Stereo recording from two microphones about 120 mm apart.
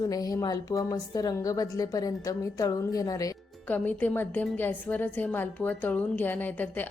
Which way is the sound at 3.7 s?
15° left (ahead or behind).